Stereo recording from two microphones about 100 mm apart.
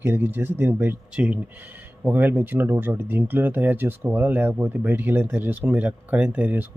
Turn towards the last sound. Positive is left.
turn(degrees=-15)  # may be behind; listen again after turning